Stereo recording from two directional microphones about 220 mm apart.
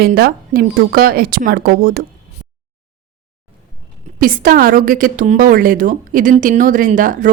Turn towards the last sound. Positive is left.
turn(degrees=-35)  # may be behind; listen again after turning